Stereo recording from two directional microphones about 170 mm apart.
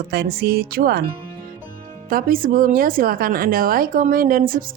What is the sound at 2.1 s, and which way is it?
Speech, 55° right (ahead or behind).